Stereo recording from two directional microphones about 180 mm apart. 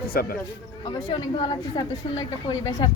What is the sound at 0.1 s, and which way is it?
Speech, 55° left (ahead or behind).